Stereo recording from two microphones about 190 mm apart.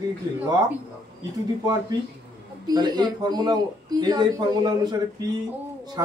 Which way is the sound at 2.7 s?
20° right (ahead or behind).